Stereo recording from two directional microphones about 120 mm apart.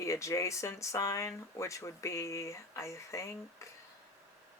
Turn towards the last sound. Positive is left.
turn(degrees=25)  # may be behind; listen again after turning